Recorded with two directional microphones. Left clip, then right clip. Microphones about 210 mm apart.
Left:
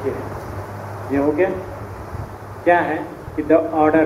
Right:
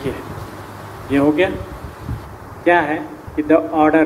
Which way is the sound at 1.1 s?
75° right (ahead or behind).